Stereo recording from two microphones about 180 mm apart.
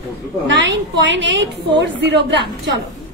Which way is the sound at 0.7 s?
80° right.